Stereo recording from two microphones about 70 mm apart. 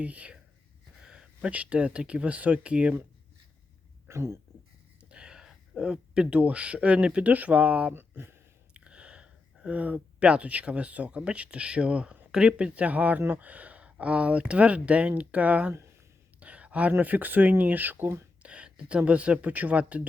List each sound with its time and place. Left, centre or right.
0.0 s speech: centre
4.1 s speech: right
5.1 s a sound: centre
6.4 s speech: centre
7.9 s speech: right
8.7 s speech: centre
16.4 s a sound: centre
17.0 s speech: right
18.4 s speech: centre